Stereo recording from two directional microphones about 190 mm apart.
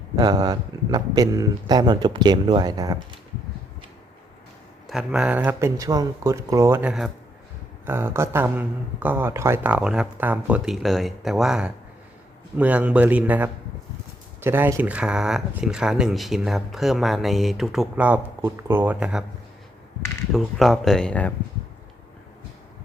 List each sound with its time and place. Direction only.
0.2 s speech: 20° right (ahead or behind)
4.9 s speech: 5° right (ahead or behind)
20.3 s speech: centre (ahead or behind)